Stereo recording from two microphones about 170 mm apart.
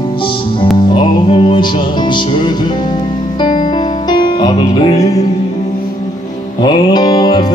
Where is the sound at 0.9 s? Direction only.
30° left (ahead or behind).